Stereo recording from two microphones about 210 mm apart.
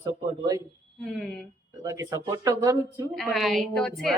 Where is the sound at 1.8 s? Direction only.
15° right (ahead or behind).